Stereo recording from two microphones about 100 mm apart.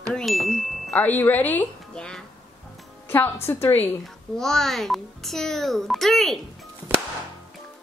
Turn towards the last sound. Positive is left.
turn(degrees=-15)  # may be behind; listen again after turning